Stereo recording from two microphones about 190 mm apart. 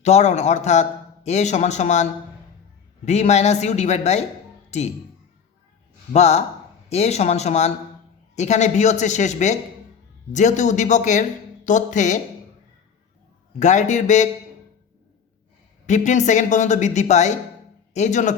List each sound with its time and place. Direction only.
0.0 s a man's voice: 35° left (ahead or behind)
3.1 s a man's voice: 35° left (ahead or behind)
6.1 s a man's voice: 35° left (ahead or behind)
13.6 s a man's voice: 40° left (ahead or behind)
15.9 s a man's voice: 40° left (ahead or behind)